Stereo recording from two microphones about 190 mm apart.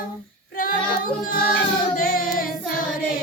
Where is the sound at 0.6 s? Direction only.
50° left (ahead or behind).